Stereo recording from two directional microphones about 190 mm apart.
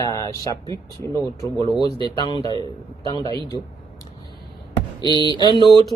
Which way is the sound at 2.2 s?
25° left (ahead or behind).